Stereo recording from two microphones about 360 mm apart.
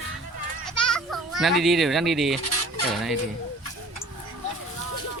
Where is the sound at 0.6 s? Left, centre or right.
Centre.